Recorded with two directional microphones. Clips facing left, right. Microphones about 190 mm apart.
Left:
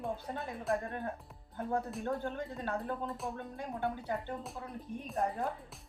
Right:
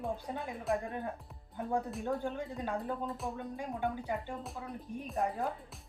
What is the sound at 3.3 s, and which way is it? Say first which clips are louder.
Speech: right 2 dB; 15° right (ahead or behind).